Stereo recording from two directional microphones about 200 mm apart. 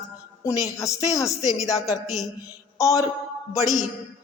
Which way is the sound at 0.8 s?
15° left (ahead or behind).